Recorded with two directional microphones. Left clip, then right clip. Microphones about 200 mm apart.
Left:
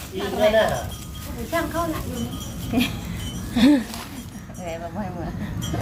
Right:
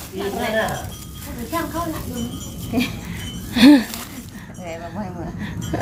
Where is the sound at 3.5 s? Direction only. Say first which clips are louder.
Right 6 dB; 40° right (ahead or behind).